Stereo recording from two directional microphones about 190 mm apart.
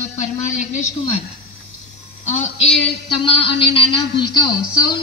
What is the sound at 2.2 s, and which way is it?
Speech, 40° left (ahead or behind).